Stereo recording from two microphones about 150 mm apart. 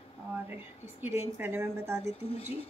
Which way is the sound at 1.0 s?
15° right (ahead or behind).